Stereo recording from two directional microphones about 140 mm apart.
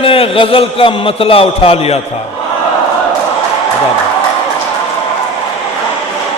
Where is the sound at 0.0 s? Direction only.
40° left (ahead or behind).